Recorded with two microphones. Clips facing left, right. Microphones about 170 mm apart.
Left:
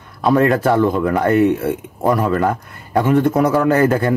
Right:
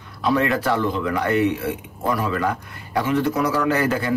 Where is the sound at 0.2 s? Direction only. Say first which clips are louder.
Left 6 dB; 45° left (ahead or behind).